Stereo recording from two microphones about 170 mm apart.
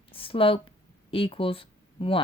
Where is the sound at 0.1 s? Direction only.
30° left (ahead or behind).